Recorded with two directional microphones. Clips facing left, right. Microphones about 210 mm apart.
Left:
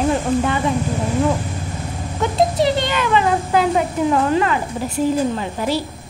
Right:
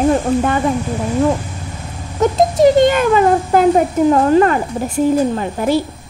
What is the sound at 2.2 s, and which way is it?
A woman's voice, 45° right (ahead or behind).